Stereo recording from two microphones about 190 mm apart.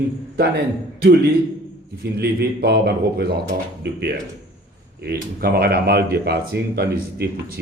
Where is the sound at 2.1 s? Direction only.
55° right (ahead or behind).